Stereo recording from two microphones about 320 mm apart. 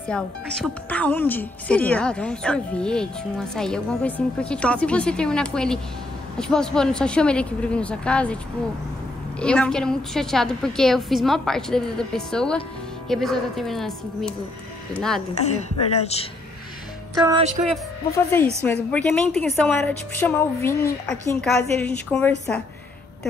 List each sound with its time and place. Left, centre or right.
0.1 s speech: centre
9.4 s speech: centre
15.3 s a woman's voice: left
17.2 s speech: centre
17.6 s a woman's voice: centre